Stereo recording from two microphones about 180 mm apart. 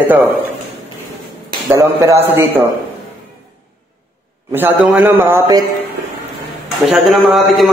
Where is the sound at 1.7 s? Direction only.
15° right (ahead or behind).